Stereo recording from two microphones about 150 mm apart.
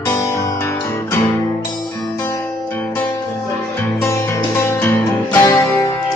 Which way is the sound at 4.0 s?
20° left (ahead or behind).